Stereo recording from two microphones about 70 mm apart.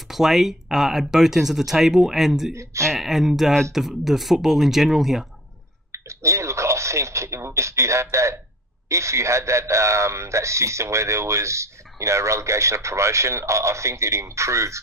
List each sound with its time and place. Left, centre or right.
0.1 s speech: centre
2.5 s a man's voice: right
2.9 s speech: centre
5.9 s a sound: right
8.8 s a man's voice: right